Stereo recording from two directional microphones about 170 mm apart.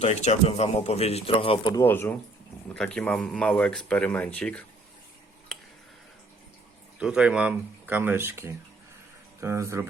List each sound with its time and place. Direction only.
0.0 s speech: 40° left (ahead or behind)
1.7 s speech: 15° left (ahead or behind)
7.0 s speech: 5° right (ahead or behind)